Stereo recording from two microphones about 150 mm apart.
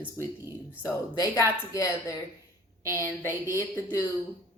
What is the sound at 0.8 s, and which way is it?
A woman's voice, 15° left (ahead or behind).